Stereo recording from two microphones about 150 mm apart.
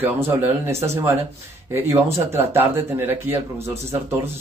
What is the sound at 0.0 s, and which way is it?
A man's voice, 15° right (ahead or behind).